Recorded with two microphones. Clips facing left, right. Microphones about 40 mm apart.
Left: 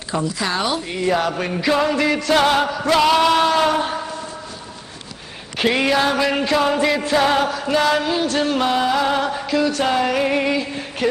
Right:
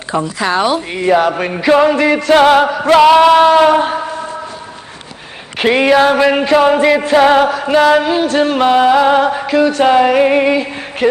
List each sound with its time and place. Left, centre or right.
0.1 s music: right
5.5 s music: right